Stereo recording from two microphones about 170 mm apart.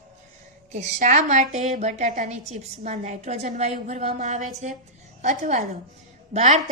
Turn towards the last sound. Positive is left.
turn(degrees=-45)  # may be behind; listen again after turning